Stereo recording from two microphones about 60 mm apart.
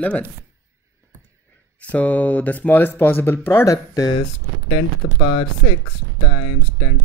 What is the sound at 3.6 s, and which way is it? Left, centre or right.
Speech, left.